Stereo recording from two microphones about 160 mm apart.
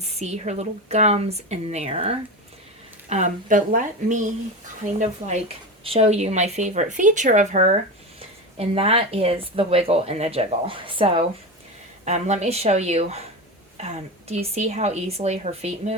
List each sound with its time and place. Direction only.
0.0 s speech: 40° right (ahead or behind)